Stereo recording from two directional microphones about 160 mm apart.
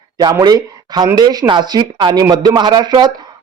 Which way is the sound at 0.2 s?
25° right (ahead or behind).